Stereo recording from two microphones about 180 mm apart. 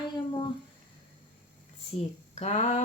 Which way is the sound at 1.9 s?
35° left (ahead or behind).